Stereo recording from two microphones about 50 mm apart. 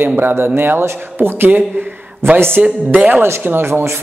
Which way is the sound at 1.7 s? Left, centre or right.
Right.